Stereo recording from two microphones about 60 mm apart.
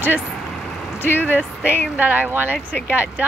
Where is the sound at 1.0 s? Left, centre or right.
Left.